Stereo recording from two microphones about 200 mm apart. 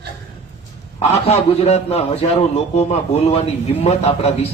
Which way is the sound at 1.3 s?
30° left (ahead or behind).